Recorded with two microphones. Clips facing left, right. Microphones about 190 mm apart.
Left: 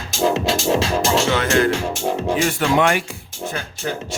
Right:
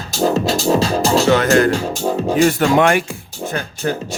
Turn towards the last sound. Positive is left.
turn(degrees=-40)  # may be behind; listen again after turning